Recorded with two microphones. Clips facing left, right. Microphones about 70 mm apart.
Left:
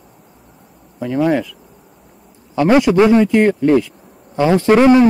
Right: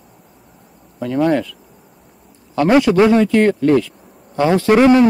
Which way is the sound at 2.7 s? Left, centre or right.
Centre.